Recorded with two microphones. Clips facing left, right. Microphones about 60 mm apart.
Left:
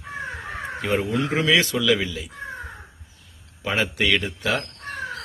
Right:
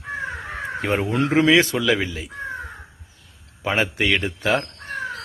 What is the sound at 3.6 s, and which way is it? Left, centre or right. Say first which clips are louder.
Speech: right 2 dB; right.